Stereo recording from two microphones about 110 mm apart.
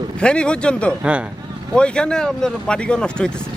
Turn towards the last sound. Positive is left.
turn(degrees=10)  # may be behind; listen again after turning